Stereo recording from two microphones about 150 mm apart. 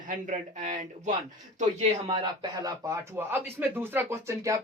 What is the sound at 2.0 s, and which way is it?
Speech, 30° right (ahead or behind).